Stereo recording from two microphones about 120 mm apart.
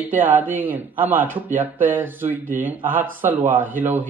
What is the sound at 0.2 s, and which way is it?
Speech, 15° right (ahead or behind).